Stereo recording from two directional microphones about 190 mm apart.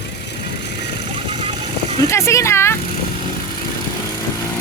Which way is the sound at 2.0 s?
15° left (ahead or behind).